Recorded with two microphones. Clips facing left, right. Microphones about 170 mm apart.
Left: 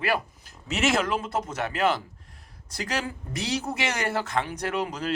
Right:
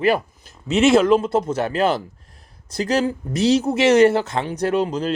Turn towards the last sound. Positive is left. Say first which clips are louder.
# right 8 dB
turn(degrees=-30)  # may be behind; listen again after turning